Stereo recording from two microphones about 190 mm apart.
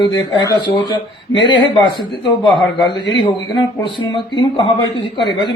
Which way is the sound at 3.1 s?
25° left (ahead or behind).